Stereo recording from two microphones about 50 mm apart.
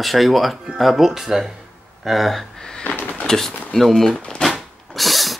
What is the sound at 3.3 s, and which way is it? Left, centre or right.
Speech, centre.